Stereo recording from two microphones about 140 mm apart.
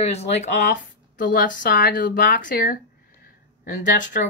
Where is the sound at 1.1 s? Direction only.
80° left.